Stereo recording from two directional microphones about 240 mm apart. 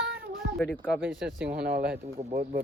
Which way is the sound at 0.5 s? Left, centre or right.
Centre.